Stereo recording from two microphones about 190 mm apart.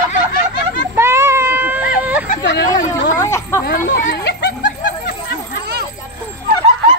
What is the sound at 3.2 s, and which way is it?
Speech, 15° left (ahead or behind).